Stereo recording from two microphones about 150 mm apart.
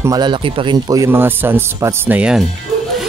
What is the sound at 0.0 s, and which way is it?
Speech, 25° right (ahead or behind).